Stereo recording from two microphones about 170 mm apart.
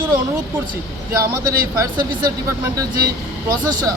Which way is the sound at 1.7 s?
25° right (ahead or behind).